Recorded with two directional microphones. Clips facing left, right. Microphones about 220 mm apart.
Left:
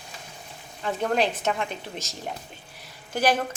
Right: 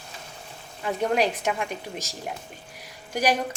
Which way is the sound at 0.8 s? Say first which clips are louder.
Right 1 dB; 10° right (ahead or behind).